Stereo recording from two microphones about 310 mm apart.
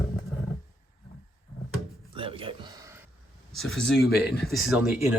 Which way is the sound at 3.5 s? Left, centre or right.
Centre.